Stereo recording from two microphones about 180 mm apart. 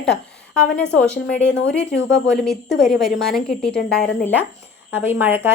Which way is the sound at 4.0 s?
60° left (ahead or behind).